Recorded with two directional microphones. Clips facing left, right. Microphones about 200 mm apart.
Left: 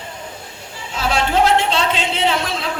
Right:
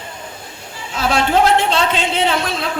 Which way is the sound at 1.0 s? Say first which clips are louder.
Right 2 dB; 50° right (ahead or behind).